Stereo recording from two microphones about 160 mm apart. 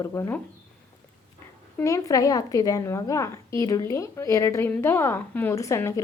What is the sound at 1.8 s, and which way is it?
A woman's voice, 20° left (ahead or behind).